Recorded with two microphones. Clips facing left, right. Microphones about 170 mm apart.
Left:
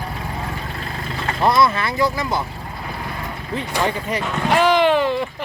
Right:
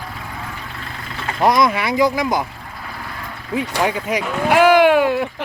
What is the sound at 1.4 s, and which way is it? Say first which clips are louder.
Speech: right 1 dB; 15° right (ahead or behind).